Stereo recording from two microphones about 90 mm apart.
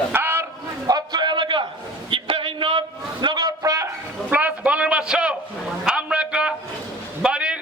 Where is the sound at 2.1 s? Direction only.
90° right; by 2.8 s 70° right (ahead or behind).